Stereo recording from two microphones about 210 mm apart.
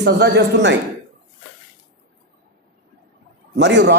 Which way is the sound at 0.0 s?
55° right (ahead or behind).